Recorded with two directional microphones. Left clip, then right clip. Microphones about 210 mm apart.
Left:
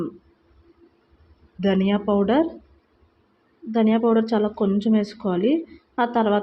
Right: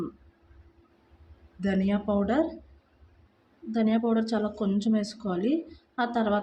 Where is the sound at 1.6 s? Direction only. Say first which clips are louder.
Left 7 dB; 15° left (ahead or behind).